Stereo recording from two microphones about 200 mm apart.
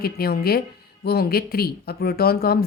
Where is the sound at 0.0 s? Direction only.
50° left (ahead or behind).